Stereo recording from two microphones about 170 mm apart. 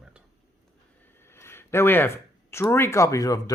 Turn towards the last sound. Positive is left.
turn(degrees=20)  # may be behind; listen again after turning